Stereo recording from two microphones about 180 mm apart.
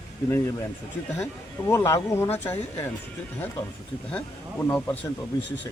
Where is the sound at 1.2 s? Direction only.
15° left (ahead or behind).